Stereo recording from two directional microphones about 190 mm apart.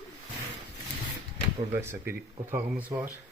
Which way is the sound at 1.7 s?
10° right (ahead or behind).